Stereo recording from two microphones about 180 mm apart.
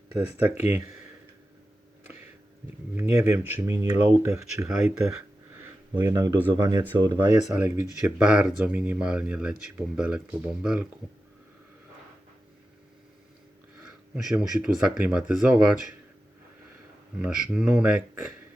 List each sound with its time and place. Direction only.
0.2 s speech: 10° right (ahead or behind)
2.9 s speech: 10° right (ahead or behind)
4.7 s speech: 5° right (ahead or behind)
6.0 s speech: 15° right (ahead or behind)
7.4 s speech: 5° right (ahead or behind)
14.3 s speech: 5° right (ahead or behind)
17.2 s speech: 5° right (ahead or behind)